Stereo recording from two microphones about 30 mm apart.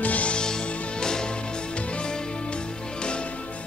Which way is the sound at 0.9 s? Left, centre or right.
Left.